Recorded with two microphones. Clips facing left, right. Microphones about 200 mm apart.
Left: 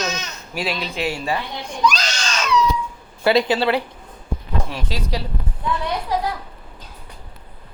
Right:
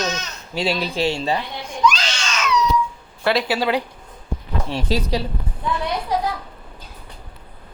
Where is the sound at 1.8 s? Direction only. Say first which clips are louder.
Right 1 dB; 40° left (ahead or behind).